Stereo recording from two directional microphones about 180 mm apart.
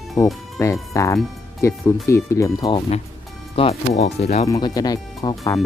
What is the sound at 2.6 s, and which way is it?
Speech, 35° left (ahead or behind).